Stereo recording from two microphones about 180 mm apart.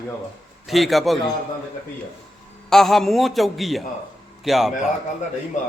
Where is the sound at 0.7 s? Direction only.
Centre (ahead or behind).